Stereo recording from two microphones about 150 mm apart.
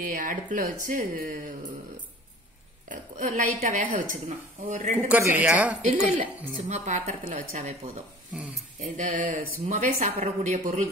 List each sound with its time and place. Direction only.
0.0 s speech: 65° right (ahead or behind)
2.9 s speech: 60° right (ahead or behind)
4.9 s speech: 10° right (ahead or behind)
6.5 s speech: 55° right (ahead or behind)